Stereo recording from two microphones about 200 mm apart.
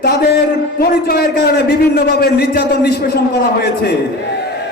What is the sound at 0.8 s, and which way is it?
A man's voice, 50° left (ahead or behind).